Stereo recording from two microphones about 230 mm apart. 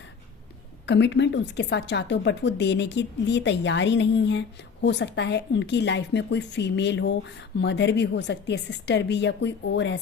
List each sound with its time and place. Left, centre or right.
0.9 s a woman's voice: left